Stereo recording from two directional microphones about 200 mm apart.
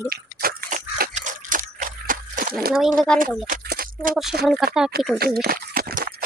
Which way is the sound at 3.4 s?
45° right (ahead or behind).